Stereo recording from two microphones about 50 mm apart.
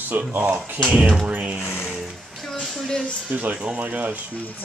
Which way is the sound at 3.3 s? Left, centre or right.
Right.